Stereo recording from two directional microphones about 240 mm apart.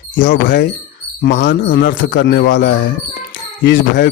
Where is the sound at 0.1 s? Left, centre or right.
Left.